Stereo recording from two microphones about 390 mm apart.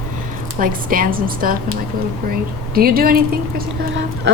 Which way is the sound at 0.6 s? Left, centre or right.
Right.